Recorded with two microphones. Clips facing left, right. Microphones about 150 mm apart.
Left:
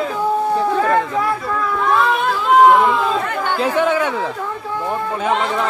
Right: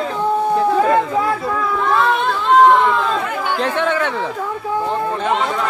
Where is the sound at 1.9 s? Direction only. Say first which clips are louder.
Even; centre (ahead or behind).